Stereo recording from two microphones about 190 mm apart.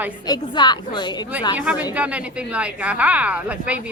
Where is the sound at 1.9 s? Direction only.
5° right (ahead or behind).